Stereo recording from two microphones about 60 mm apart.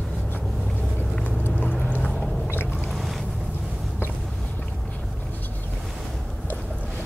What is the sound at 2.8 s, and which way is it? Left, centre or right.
Boat, centre.